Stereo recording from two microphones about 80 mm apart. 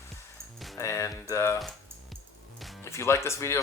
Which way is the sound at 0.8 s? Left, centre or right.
Left.